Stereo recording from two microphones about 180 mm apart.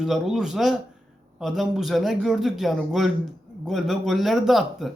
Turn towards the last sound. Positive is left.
turn(degrees=0)  # may be behind; listen again after turning